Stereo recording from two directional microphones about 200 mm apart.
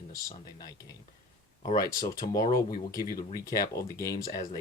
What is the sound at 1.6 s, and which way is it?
Speech, 45° left (ahead or behind).